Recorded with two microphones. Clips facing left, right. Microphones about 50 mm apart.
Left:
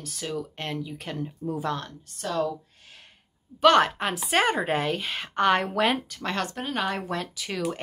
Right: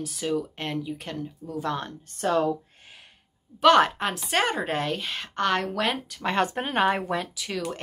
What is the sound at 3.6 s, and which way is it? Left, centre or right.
Speech, centre.